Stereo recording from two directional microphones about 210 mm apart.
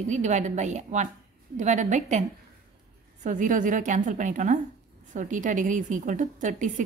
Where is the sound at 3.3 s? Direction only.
35° right (ahead or behind).